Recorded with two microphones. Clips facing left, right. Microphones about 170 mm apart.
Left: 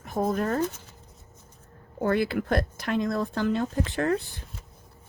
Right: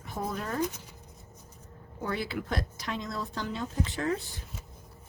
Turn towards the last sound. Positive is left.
turn(degrees=60)  # may be behind; listen again after turning